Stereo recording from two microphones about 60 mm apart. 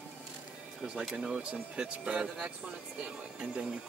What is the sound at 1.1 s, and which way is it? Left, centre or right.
Speech, centre.